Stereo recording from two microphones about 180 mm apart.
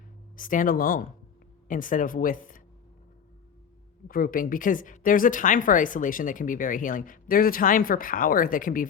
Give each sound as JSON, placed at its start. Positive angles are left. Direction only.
{"t": 0.3, "sound": "a woman's voice", "side_deg": 50}
{"t": 4.1, "sound": "a woman's voice", "side_deg": 50}